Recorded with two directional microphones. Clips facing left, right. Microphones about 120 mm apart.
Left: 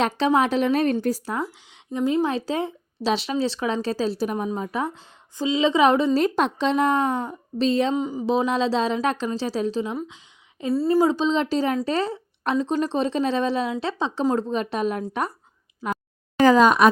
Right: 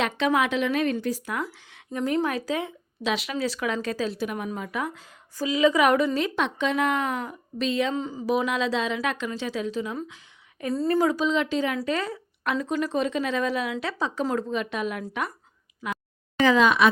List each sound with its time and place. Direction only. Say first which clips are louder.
0.0 s speech: left 3 dB; 35° left (ahead or behind)
1.7 s speech: left 3 dB; 20° left (ahead or behind)
6.1 s speech: left 5 dB; 40° left (ahead or behind)
7.9 s a sound: left 3 dB; 15° left (ahead or behind)
8.4 s a woman's voice: left 5 dB; 30° left (ahead or behind)
16.4 s speech: left 4 dB; 40° left (ahead or behind)